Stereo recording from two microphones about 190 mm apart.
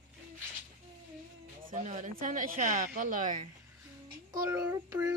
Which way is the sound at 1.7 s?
40° right (ahead or behind).